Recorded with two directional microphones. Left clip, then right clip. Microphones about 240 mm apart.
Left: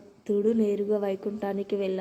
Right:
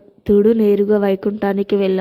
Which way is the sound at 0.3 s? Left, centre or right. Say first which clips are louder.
Right 12 dB; right.